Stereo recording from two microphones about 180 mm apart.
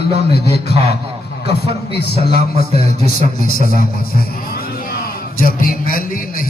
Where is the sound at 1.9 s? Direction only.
65° left (ahead or behind).